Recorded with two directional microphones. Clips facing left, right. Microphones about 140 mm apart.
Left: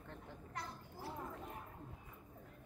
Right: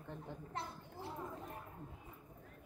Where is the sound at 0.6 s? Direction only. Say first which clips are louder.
Right 2 dB; 25° right (ahead or behind).